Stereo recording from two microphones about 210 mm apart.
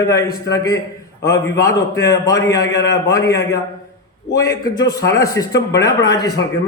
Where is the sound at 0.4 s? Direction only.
15° left (ahead or behind).